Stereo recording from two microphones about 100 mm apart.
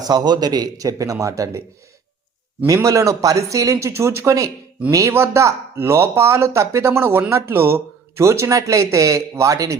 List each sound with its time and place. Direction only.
0.0 s speech: 40° right (ahead or behind)
2.6 s speech: 30° right (ahead or behind)